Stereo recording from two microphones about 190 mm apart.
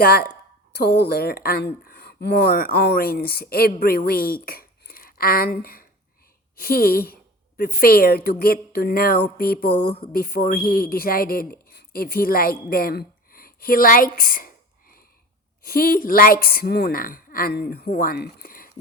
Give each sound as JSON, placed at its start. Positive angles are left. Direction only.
{"t": 0.0, "sound": "a woman's voice", "side_deg": 55}
{"t": 4.4, "sound": "dishes", "side_deg": 50}
{"t": 6.6, "sound": "a woman's voice", "side_deg": 50}